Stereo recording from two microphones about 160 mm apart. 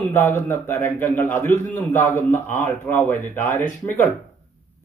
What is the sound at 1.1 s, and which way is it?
Speech, 50° left (ahead or behind).